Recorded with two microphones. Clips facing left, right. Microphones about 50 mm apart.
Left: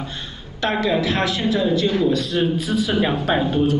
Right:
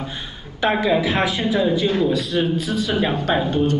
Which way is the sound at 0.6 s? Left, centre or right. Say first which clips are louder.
Right 2 dB; centre.